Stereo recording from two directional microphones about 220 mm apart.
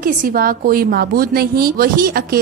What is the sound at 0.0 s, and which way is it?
A woman's voice, 40° right (ahead or behind).